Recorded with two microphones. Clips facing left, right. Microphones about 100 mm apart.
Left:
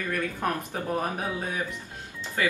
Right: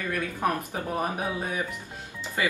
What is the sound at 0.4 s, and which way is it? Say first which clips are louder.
Speech: right 3 dB; 10° right (ahead or behind).